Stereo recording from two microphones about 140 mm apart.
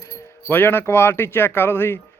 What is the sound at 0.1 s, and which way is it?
Speech, 15° left (ahead or behind).